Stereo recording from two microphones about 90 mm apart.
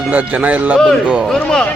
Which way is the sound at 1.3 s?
5° left (ahead or behind).